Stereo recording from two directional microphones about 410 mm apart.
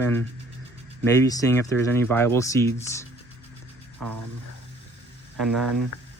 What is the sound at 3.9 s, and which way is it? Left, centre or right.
Music, right.